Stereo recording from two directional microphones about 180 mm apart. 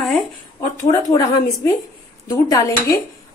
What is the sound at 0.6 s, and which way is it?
A woman's voice, 20° left (ahead or behind).